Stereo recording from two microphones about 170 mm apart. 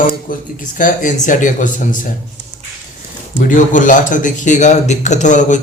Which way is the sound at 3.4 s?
50° left (ahead or behind).